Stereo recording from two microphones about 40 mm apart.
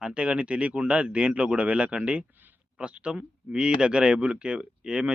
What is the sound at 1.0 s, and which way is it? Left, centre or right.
Speech, centre.